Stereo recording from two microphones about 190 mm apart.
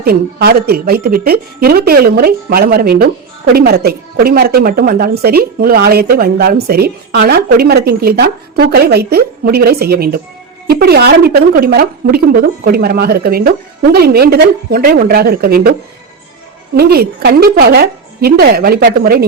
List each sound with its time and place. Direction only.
0.0 s a woman's voice: 55° right (ahead or behind)
16.7 s a woman's voice: 55° right (ahead or behind)